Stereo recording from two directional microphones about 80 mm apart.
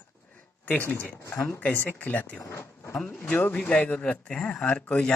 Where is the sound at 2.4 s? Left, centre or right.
Left.